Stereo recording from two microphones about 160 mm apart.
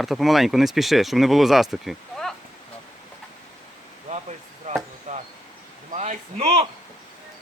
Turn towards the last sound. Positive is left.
turn(degrees=-40)  # may be behind; listen again after turning